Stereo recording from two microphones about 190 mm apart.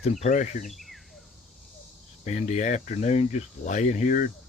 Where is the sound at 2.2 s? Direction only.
35° left (ahead or behind).